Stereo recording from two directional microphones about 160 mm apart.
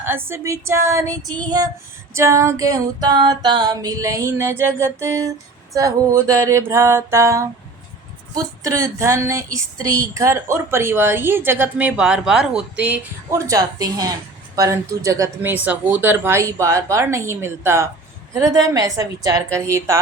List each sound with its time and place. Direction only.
0.0 s speech: 15° right (ahead or behind)
2.1 s music: 15° right (ahead or behind)
5.7 s speech: 20° right (ahead or behind)
13.5 s music: 20° right (ahead or behind)
15.6 s speech: 10° right (ahead or behind)
18.7 s music: 20° right (ahead or behind)